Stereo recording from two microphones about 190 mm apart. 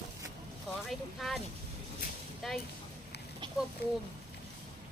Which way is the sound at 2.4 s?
Centre (ahead or behind).